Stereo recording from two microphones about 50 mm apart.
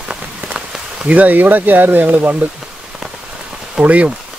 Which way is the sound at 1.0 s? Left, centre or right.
Right.